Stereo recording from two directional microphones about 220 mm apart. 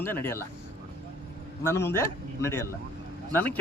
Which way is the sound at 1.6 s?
10° left (ahead or behind).